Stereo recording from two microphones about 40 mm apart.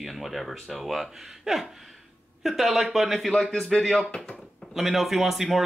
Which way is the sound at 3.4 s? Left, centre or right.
Centre.